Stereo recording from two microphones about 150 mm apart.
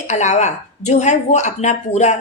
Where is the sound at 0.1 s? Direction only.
50° left (ahead or behind).